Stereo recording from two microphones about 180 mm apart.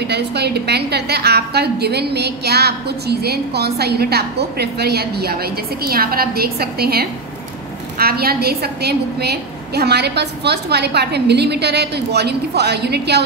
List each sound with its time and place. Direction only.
0.0 s a woman's voice: 65° right (ahead or behind)